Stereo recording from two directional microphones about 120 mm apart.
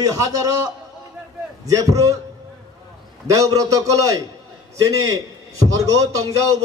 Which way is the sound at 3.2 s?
30° right (ahead or behind).